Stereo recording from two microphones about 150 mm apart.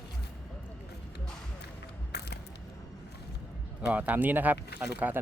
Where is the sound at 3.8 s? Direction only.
10° right (ahead or behind).